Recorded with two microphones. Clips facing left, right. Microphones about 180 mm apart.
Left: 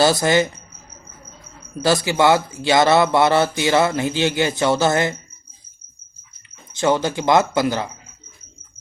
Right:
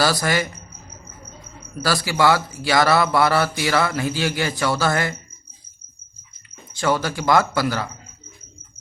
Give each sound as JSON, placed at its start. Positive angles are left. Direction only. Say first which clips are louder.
{"t": 0.0, "sound": "speech", "louder": "left 5 dB", "side_deg": 25}
{"t": 1.8, "sound": "speech", "louder": "left 3 dB", "side_deg": 20}
{"t": 6.7, "sound": "speech", "louder": "left 3 dB", "side_deg": 20}